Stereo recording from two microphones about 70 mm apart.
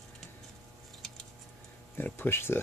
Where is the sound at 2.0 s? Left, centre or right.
Left.